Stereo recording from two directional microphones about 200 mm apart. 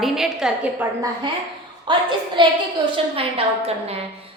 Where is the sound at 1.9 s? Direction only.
25° right (ahead or behind).